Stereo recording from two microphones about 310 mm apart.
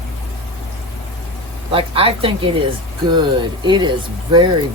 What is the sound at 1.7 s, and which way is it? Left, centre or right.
Speech, centre.